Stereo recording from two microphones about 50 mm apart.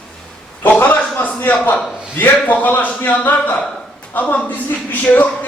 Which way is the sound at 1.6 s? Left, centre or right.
Left.